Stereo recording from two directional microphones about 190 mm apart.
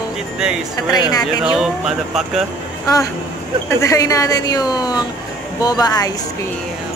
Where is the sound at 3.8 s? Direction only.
15° left (ahead or behind).